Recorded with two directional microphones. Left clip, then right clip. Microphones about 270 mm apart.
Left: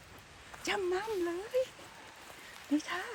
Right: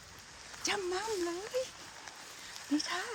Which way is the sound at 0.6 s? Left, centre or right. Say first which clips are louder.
Left 1 dB; centre.